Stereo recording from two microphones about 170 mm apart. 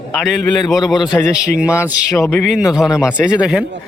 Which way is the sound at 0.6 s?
20° left (ahead or behind).